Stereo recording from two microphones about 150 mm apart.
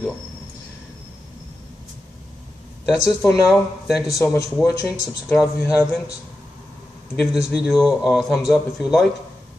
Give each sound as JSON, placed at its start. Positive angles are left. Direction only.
{"t": 2.8, "sound": "speech", "side_deg": 0}
{"t": 4.2, "sound": "speech", "side_deg": 15}
{"t": 4.6, "sound": "speech", "side_deg": -5}
{"t": 5.4, "sound": "speech", "side_deg": 25}
{"t": 7.2, "sound": "speech", "side_deg": -5}